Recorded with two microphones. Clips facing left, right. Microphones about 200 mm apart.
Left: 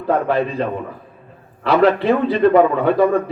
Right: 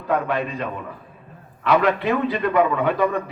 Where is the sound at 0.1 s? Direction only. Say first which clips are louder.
Left 5 dB; 30° left (ahead or behind).